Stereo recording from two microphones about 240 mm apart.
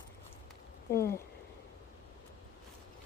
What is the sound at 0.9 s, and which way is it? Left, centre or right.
Speech, centre.